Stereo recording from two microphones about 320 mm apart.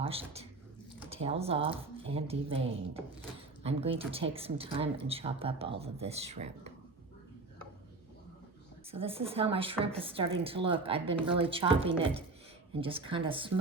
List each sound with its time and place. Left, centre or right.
0.0 s speech: centre
8.9 s speech: centre